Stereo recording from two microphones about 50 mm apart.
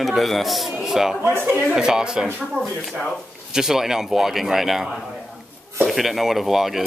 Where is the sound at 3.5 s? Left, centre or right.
Centre.